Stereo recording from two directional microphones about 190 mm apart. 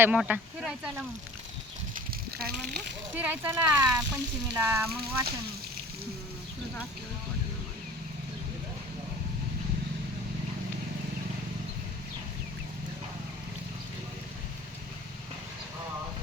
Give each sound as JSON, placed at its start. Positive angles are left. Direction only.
{"t": 0.0, "sound": "speech", "side_deg": -5}
{"t": 2.4, "sound": "speech", "side_deg": -55}
{"t": 3.2, "sound": "speech", "side_deg": -10}